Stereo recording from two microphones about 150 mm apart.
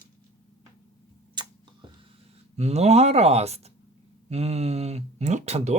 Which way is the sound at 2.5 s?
45° right (ahead or behind).